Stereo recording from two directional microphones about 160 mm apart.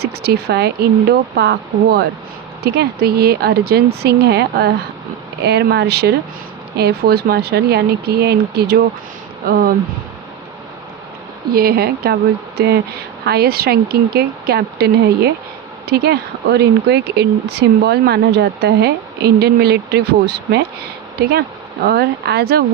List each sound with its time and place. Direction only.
0.0 s speech: 90° right
9.5 s speech: 65° right (ahead or behind)
11.5 s speech: 75° right (ahead or behind)
12.5 s speech: 90° right
13.2 s speech: 80° right
21.8 s speech: 85° right